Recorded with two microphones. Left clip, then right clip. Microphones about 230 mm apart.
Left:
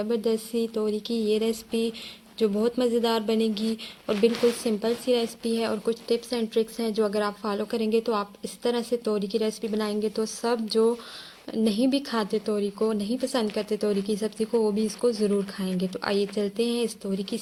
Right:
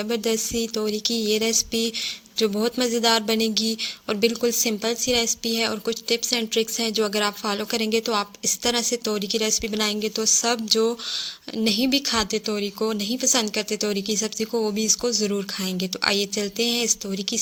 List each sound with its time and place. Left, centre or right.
0.1 s speech: right